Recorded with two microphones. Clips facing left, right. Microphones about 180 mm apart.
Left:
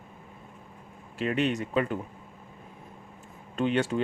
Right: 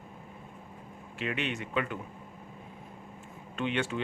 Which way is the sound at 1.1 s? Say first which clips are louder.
Left 7 dB; 40° left (ahead or behind).